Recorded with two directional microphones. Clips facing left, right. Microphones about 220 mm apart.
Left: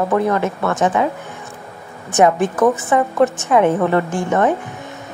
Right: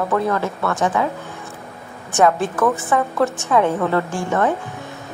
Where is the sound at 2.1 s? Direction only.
20° left (ahead or behind).